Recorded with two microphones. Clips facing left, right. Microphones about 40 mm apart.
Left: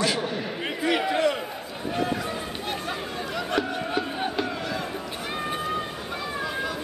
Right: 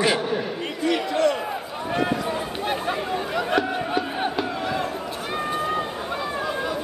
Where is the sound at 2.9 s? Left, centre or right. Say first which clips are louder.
Right 5 dB; centre.